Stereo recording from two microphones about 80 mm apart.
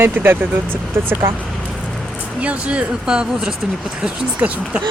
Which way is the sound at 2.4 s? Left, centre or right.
Centre.